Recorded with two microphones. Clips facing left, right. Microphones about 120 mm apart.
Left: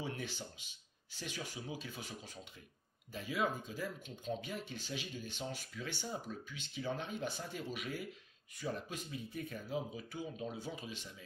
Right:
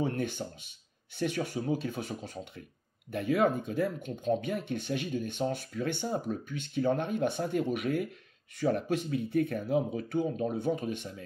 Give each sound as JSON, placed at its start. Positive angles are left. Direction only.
{"t": 0.0, "sound": "speech", "side_deg": -55}